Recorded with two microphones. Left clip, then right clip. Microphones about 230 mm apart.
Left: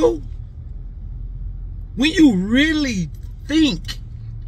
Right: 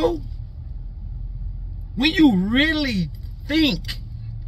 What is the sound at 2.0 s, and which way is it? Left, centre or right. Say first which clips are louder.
Speech: left 2 dB; centre.